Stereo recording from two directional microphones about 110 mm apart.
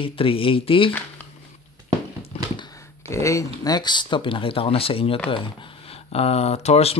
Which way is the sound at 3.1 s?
30° left (ahead or behind).